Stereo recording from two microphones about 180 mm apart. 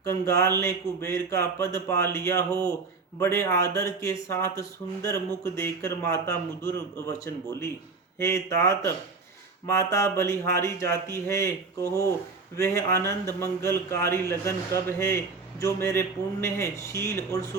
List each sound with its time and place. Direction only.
0.0 s a man's voice: 15° left (ahead or behind)
8.2 s a man's voice: 15° left (ahead or behind)